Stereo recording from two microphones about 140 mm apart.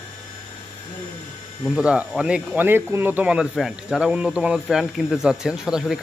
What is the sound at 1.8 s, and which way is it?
Speech, 5° right (ahead or behind).